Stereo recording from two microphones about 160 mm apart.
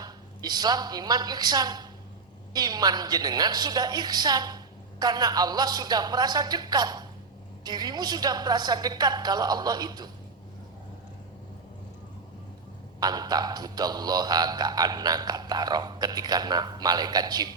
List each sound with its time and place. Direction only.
0.0 s a woman's voice: 25° right (ahead or behind)
13.0 s a woman's voice: 25° right (ahead or behind)